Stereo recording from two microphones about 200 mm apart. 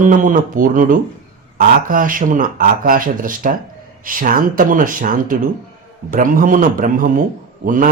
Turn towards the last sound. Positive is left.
turn(degrees=-40)  # may be behind; listen again after turning